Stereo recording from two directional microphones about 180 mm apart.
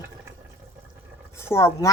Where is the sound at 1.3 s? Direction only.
15° left (ahead or behind).